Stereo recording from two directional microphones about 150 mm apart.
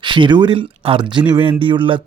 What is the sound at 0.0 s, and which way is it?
Speech, 30° right (ahead or behind).